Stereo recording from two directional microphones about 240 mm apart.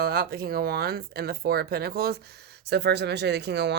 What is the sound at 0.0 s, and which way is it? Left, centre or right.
Speech, right.